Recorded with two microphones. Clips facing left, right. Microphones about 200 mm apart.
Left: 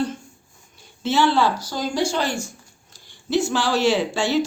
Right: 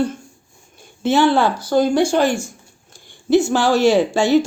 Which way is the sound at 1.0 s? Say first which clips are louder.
Right 4 dB; 50° right (ahead or behind).